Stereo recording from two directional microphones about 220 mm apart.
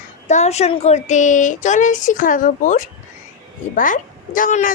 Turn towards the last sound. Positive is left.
turn(degrees=35)  # may be behind; listen again after turning